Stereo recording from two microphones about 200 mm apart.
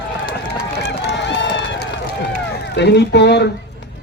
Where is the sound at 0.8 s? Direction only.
60° left (ahead or behind).